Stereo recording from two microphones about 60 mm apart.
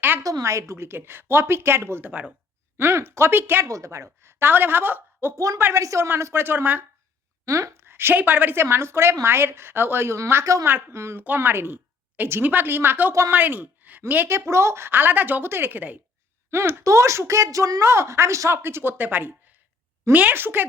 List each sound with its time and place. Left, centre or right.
0.2 s a woman's voice: right
0.9 s a woman's voice: right
2.0 s speech: right
2.7 s a woman's voice: right
3.6 s a woman's voice: right
5.7 s a woman's voice: right
6.4 s a woman's voice: right
7.4 s a woman's voice: right
8.7 s speech: right
10.4 s a woman's voice: right
10.7 s a woman's voice: right
10.9 s a woman's voice: right
14.3 s a woman's voice: right
16.5 s a woman's voice: right